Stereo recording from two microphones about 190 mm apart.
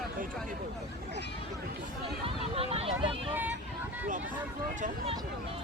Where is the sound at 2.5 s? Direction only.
30° right (ahead or behind).